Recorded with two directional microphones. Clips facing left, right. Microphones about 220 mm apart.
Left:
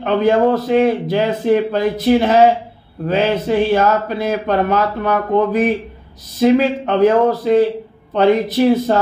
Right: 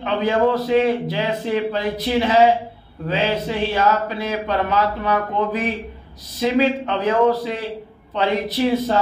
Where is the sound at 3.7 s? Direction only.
50° left (ahead or behind).